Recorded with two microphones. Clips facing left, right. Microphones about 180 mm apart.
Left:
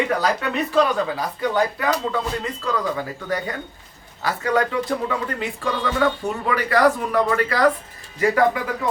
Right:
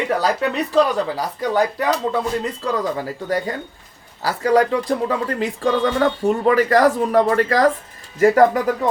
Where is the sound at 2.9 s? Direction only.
35° right (ahead or behind).